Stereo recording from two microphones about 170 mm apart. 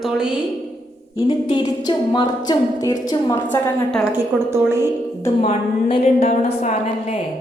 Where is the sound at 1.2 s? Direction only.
25° left (ahead or behind).